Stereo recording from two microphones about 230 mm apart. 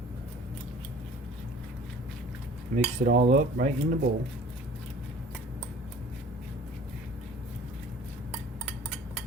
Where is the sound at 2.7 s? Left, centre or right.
Right.